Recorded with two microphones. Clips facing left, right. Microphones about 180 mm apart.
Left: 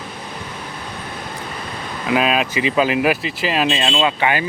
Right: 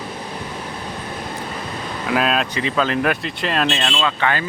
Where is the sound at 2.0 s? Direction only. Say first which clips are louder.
Left 2 dB; 5° left (ahead or behind).